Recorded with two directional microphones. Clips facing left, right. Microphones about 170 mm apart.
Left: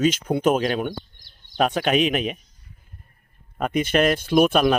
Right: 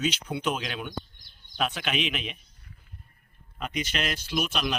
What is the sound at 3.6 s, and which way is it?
Speech, 50° left (ahead or behind).